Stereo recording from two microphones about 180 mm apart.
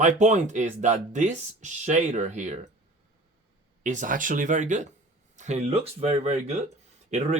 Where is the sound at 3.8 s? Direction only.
45° right (ahead or behind).